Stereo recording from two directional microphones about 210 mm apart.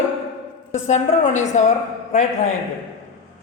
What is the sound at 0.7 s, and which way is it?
Speech, 35° left (ahead or behind).